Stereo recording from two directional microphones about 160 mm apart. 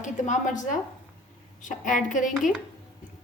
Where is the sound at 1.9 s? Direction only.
50° left (ahead or behind).